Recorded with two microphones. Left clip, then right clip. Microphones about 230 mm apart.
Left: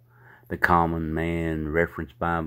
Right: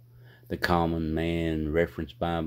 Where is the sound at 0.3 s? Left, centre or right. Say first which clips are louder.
Left 6 dB; centre.